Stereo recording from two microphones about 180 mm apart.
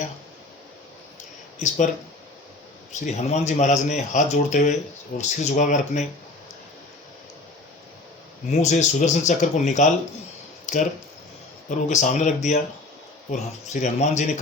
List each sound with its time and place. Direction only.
1.5 s speech: 40° left (ahead or behind)
3.0 s speech: 40° left (ahead or behind)
8.4 s speech: 40° left (ahead or behind)
11.9 s speech: 40° left (ahead or behind)